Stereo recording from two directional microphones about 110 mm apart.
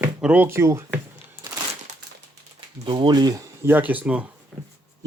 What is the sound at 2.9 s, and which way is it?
Speech, 40° right (ahead or behind).